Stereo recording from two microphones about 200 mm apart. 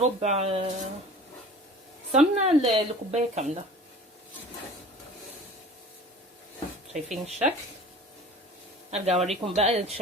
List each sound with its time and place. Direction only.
0.2 s speech: 30° right (ahead or behind)
2.1 s speech: 35° right (ahead or behind)
6.9 s speech: 35° right (ahead or behind)
8.9 s speech: 30° right (ahead or behind)